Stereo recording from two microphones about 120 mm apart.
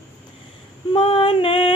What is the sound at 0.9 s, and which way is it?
Female singing, 50° left (ahead or behind).